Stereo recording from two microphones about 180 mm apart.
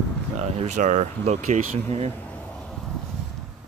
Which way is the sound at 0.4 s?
40° right (ahead or behind).